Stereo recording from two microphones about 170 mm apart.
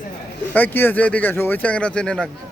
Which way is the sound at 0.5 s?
10° left (ahead or behind).